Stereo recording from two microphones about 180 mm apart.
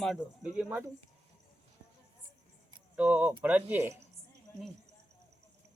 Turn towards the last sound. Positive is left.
turn(degrees=-10)  # may be behind; listen again after turning